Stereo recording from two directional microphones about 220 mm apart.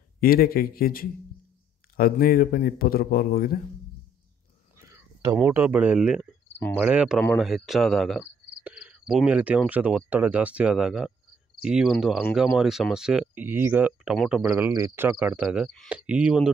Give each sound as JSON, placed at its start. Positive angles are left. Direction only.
{"t": 0.2, "sound": "a man's voice", "side_deg": 45}
{"t": 4.7, "sound": "speech", "side_deg": -15}
{"t": 7.3, "sound": "cricket", "side_deg": 0}
{"t": 11.6, "sound": "speech", "side_deg": 0}